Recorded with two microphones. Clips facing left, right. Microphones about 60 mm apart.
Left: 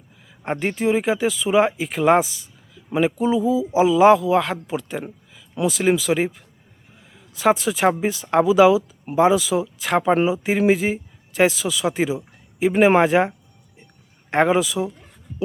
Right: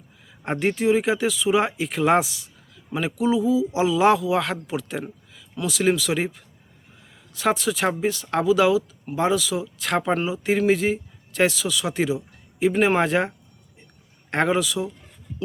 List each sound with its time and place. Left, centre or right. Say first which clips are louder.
0.3 s speech: right 1 dB; centre
12.7 s speech: left 6 dB; left
13.0 s speech: left 4 dB; centre